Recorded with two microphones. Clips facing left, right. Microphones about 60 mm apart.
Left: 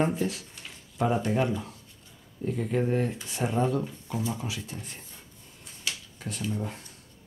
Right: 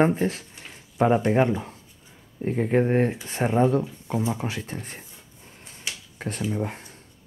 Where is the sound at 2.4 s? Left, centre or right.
Right.